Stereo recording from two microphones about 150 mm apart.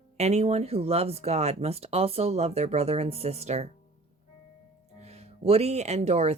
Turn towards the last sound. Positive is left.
turn(degrees=-45)  # may be behind; listen again after turning